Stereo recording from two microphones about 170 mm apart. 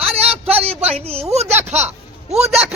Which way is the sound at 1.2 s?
40° right (ahead or behind).